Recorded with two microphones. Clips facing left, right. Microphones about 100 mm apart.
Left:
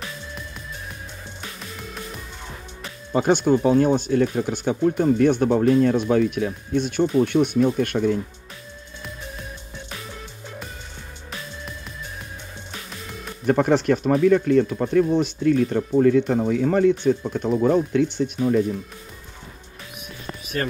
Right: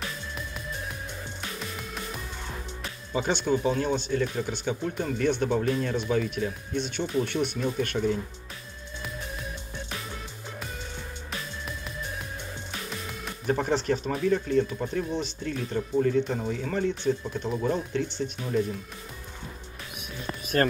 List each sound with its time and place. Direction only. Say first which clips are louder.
1.6 s music: left 1 dB; centre (ahead or behind)
3.1 s speech: left 8 dB; 50° left (ahead or behind)
13.5 s speech: left 7 dB; 60° left (ahead or behind)